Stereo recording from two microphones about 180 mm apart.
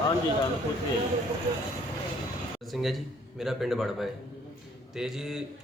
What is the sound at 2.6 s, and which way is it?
A man's voice, centre (ahead or behind).